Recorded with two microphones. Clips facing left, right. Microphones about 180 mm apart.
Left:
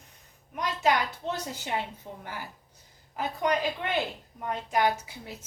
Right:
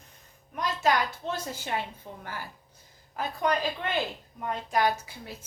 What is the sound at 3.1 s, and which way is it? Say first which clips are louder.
A woman's voice: even; 15° left (ahead or behind).